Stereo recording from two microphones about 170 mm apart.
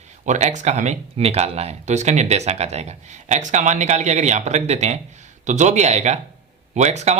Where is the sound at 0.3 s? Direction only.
45° right (ahead or behind).